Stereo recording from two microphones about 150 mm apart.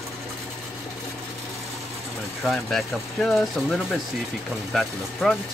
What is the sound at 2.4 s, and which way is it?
Speech, centre (ahead or behind).